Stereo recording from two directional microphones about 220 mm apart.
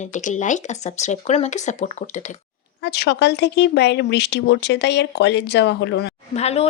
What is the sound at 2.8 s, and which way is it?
Speech, 50° left (ahead or behind).